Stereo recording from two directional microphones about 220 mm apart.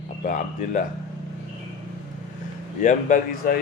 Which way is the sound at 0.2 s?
35° left (ahead or behind).